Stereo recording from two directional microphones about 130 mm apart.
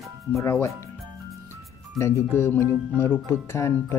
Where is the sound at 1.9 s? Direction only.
20° left (ahead or behind).